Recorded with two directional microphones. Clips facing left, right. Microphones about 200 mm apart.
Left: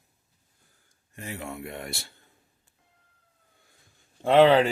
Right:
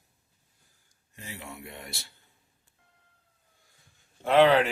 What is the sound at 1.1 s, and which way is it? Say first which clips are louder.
Speech: left 6 dB; 55° left (ahead or behind).